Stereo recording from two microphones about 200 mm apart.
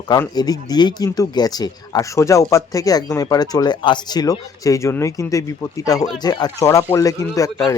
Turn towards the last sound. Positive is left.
turn(degrees=15)  # may be behind; listen again after turning